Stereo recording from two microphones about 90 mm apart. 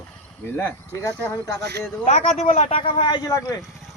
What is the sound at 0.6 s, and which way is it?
Speech, 35° left (ahead or behind).